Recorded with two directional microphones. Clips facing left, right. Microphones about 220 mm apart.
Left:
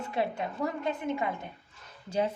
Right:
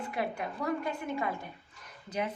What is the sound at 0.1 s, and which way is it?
A woman's voice, 25° left (ahead or behind).